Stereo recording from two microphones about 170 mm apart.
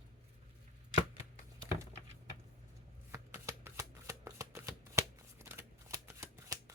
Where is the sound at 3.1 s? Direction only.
15° right (ahead or behind).